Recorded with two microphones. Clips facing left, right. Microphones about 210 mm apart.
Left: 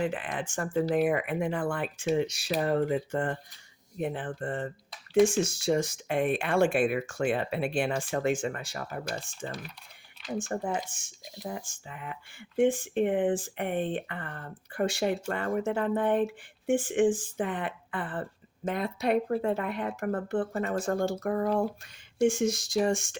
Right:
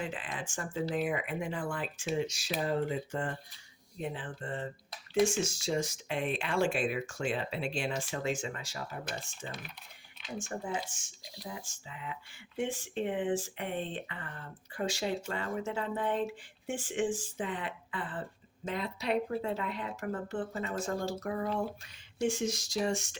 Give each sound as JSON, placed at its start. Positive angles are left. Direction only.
{"t": 0.0, "sound": "speech", "side_deg": 60}